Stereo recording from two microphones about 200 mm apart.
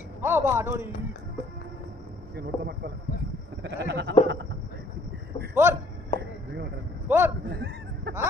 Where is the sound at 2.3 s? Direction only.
55° right (ahead or behind).